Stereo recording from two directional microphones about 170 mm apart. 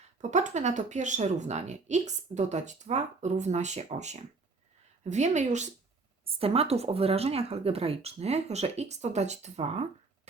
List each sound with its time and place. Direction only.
0.2 s speech: 45° right (ahead or behind)